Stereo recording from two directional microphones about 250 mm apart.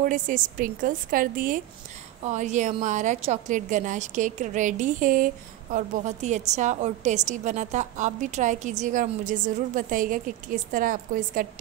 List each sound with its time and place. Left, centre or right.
0.0 s a woman's voice: right